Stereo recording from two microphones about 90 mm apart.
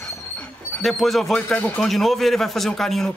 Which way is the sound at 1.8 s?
Centre (ahead or behind).